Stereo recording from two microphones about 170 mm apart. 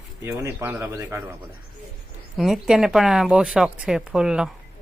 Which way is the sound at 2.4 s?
5° right (ahead or behind).